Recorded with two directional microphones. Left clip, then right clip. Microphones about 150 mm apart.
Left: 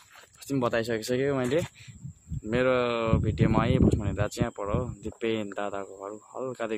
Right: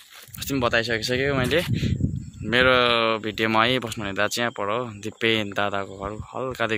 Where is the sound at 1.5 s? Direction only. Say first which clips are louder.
Right 5 dB; 10° left (ahead or behind).